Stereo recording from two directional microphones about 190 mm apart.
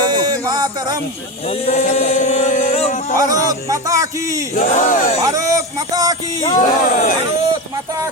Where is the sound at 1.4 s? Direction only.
30° left (ahead or behind).